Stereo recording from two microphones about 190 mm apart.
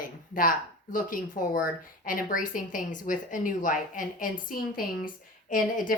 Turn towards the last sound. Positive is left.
turn(degrees=45)  # may be behind; listen again after turning